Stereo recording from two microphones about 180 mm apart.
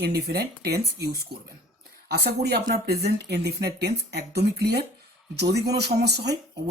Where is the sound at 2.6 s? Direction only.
65° right (ahead or behind).